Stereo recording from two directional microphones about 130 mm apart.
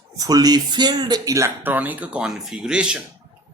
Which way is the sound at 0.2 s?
30° right (ahead or behind).